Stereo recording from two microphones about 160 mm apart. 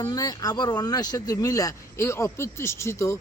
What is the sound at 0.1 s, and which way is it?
A man's voice, 25° left (ahead or behind).